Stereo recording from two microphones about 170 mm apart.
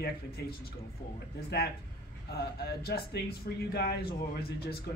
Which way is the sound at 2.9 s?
70° left (ahead or behind).